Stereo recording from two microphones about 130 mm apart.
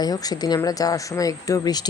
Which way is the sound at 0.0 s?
30° left (ahead or behind).